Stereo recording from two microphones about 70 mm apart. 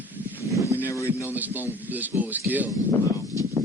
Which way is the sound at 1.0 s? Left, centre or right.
Right.